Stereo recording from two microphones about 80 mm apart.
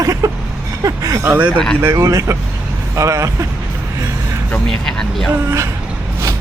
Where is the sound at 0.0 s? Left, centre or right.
Right.